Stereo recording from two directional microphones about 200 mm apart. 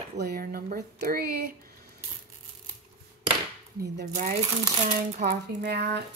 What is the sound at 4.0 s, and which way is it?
Speech, 45° right (ahead or behind).